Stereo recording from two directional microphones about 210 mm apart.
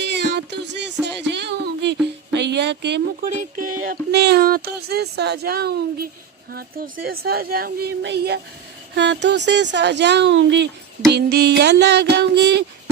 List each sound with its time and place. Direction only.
0.0 s music: 55° right (ahead or behind)
3.8 s speech: 45° right (ahead or behind)